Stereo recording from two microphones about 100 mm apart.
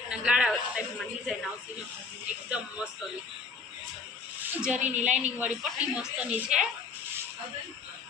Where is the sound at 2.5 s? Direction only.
10° right (ahead or behind).